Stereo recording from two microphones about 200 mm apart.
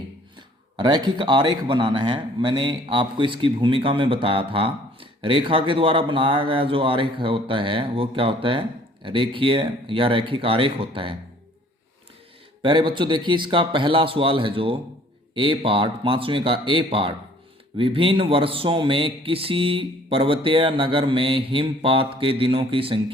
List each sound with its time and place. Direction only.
0.8 s speech: 20° right (ahead or behind)
12.6 s speech: 25° right (ahead or behind)